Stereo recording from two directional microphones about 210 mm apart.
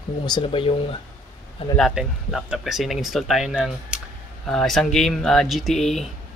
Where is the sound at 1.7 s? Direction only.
Centre (ahead or behind).